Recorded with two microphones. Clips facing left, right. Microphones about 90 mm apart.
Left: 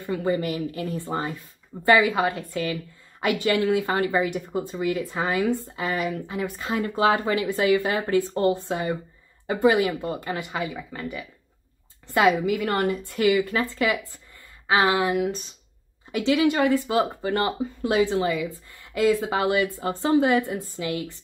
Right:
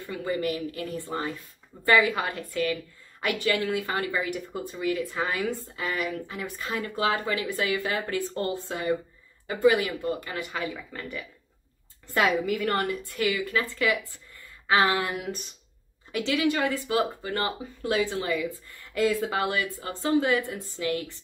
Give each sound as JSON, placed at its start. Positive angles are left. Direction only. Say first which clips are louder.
{"t": 0.0, "sound": "a woman's voice", "louder": "left 4 dB", "side_deg": 25}